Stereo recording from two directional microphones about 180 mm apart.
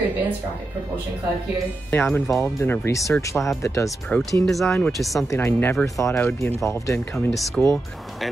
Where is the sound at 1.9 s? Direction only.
10° left (ahead or behind).